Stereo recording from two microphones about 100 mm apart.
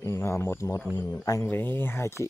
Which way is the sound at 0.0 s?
25° left (ahead or behind).